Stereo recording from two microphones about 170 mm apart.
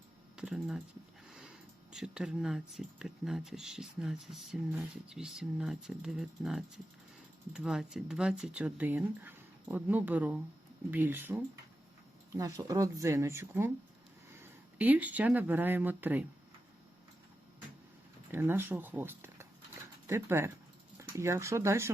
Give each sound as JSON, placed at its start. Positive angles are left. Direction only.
{"t": 0.3, "sound": "typing", "side_deg": -5}
{"t": 1.3, "sound": "speech", "side_deg": -5}
{"t": 12.4, "sound": "speech", "side_deg": -20}
{"t": 14.8, "sound": "speech", "side_deg": -10}
{"t": 18.3, "sound": "speech", "side_deg": -15}